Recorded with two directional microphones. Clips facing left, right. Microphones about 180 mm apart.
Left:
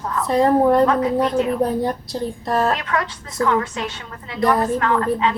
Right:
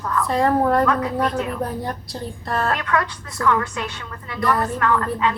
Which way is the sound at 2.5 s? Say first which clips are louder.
Left 2 dB; 20° left (ahead or behind).